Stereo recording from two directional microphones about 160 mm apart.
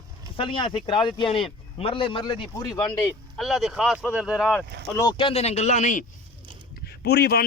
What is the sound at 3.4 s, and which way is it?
Speech, centre (ahead or behind).